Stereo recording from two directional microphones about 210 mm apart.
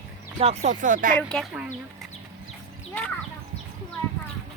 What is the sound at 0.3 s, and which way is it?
Speech, 30° right (ahead or behind).